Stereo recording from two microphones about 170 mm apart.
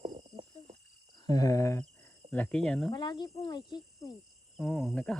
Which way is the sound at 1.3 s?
20° left (ahead or behind).